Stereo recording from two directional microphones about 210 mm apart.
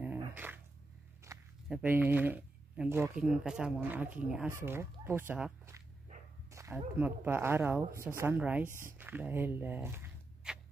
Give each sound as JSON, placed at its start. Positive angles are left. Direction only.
{"t": 0.2, "sound": "dog", "side_deg": -10}
{"t": 1.3, "sound": "walk", "side_deg": -15}
{"t": 1.7, "sound": "speech", "side_deg": -5}
{"t": 6.5, "sound": "a sound", "side_deg": -15}
{"t": 7.0, "sound": "speech", "side_deg": -10}